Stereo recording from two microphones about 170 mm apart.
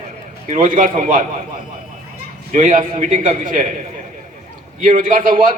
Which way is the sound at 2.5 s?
50° right (ahead or behind).